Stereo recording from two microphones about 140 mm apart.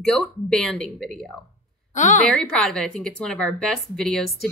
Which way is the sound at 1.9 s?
60° left (ahead or behind).